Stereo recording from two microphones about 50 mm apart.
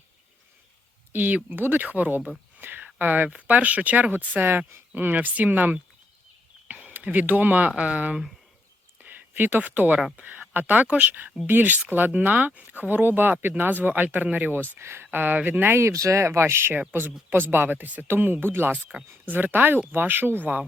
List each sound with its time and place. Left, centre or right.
1.1 s speech: right
2.6 s a sound: right
3.2 s speech: right
4.4 s speech: right
7.7 s speech: right
10.8 s speech: right
11.4 s speech: right
14.8 s speech: right
15.0 s speech: right
15.8 s speech: right
18.7 s speech: centre
19.2 s speech: right